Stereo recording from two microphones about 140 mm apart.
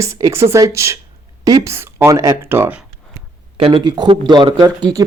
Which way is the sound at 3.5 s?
40° right (ahead or behind).